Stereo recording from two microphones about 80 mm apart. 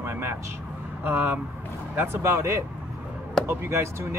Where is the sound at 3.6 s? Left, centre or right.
Right.